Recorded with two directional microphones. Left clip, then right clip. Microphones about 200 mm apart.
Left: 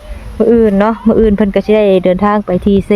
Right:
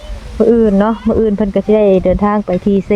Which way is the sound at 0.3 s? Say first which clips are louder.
Left 1 dB; 25° left (ahead or behind).